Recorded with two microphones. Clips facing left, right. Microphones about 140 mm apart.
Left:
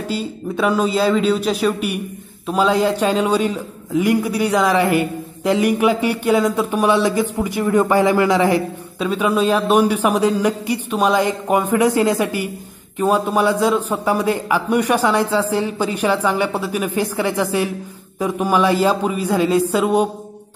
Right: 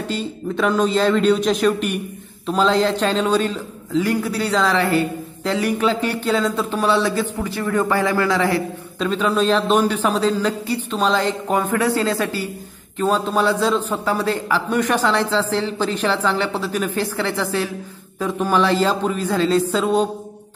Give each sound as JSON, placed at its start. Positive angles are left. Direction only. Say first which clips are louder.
{"t": 0.1, "sound": "a man's voice", "louder": "left 2 dB", "side_deg": 10}